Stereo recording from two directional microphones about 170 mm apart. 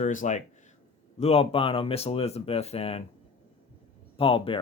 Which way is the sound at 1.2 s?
35° left (ahead or behind).